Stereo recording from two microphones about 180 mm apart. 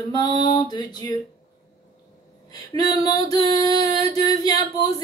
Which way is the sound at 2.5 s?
20° left (ahead or behind).